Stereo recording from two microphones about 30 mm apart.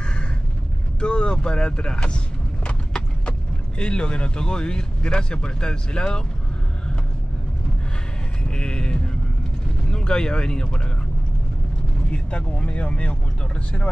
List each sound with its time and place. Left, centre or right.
0.0 s a sound: left
1.0 s speech: left
8.5 s music: left
9.8 s speech: left
12.1 s speech: left